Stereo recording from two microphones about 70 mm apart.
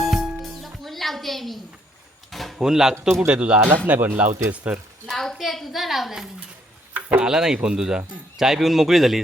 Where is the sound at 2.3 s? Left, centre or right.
Centre.